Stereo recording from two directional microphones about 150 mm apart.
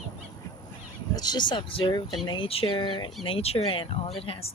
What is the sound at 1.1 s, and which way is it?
Speech, 25° left (ahead or behind).